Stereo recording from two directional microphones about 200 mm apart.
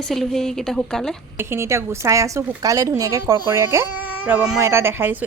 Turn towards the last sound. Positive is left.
turn(degrees=-10)  # may be behind; listen again after turning